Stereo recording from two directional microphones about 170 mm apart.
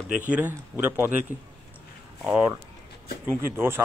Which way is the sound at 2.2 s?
5° right (ahead or behind).